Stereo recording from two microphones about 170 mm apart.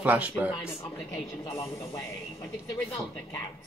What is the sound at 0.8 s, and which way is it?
Speech, 15° left (ahead or behind).